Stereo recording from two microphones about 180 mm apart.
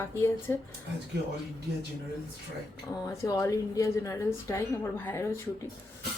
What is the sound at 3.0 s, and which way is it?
A woman's voice, 15° left (ahead or behind).